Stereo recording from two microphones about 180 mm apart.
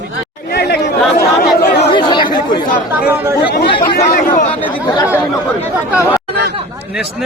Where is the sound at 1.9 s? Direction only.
25° left (ahead or behind).